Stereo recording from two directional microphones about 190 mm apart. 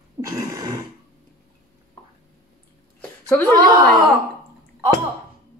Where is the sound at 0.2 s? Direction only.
15° right (ahead or behind).